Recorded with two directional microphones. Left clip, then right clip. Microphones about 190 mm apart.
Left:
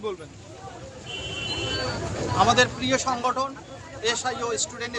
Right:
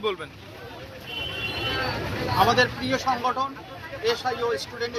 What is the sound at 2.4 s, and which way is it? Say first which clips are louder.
A man's voice: left 1 dB; 25° left (ahead or behind).